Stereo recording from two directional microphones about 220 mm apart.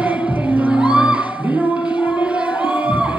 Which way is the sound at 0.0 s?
5° right (ahead or behind).